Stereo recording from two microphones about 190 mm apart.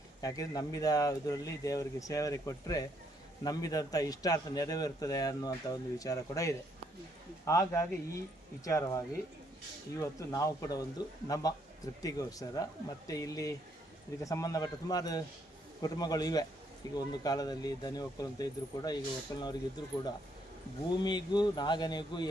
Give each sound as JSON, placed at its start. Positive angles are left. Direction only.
{"t": 0.2, "sound": "a man's voice", "side_deg": 20}